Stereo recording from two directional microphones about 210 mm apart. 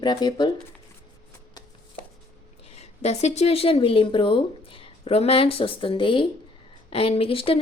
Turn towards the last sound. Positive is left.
turn(degrees=25)  # may be behind; listen again after turning